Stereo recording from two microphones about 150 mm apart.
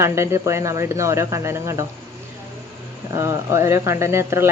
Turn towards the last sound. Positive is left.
turn(degrees=-15)  # may be behind; listen again after turning